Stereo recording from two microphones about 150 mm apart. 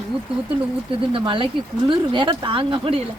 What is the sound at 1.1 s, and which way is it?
Speech, 35° right (ahead or behind).